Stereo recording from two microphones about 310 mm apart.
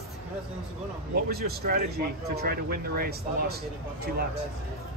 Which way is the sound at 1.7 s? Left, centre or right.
Right.